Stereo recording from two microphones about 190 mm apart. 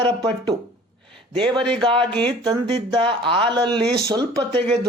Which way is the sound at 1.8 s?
25° right (ahead or behind).